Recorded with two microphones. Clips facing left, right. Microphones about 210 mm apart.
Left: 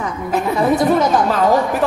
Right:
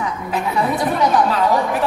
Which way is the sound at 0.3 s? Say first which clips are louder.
Left 5 dB; 45° left (ahead or behind).